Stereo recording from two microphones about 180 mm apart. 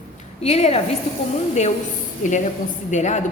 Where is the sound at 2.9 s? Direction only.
40° left (ahead or behind).